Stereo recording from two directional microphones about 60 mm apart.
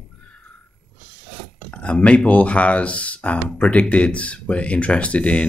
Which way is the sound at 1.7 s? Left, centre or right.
Centre.